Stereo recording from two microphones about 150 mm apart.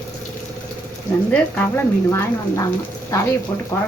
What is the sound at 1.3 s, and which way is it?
Speech, 15° left (ahead or behind).